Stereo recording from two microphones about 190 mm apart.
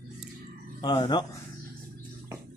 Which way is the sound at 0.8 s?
20° left (ahead or behind).